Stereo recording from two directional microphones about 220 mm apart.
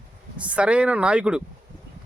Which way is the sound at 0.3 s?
5° right (ahead or behind).